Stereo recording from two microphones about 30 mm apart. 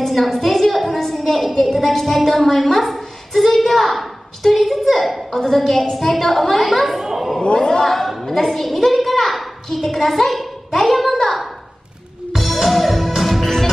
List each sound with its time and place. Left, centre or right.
0.0 s a sound: centre
1.1 s a woman's voice: centre
5.3 s a child's voice: centre
6.9 s a sound: centre
7.4 s speech: left
7.8 s a woman's voice: centre
12.4 s music: centre